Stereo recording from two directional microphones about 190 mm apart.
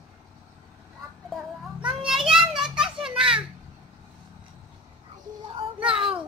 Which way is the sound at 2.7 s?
5° right (ahead or behind).